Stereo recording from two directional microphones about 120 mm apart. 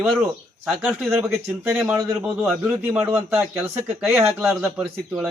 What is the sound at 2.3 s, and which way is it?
A man's voice, 5° right (ahead or behind).